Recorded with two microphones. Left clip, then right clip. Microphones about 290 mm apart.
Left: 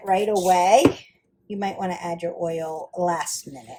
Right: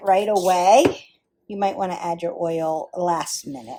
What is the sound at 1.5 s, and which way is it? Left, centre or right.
Speech, right.